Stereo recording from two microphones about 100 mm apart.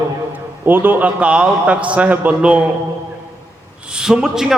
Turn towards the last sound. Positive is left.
turn(degrees=-5)  # may be behind; listen again after turning